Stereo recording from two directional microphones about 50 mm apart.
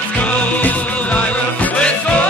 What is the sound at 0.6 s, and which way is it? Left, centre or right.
Music, left.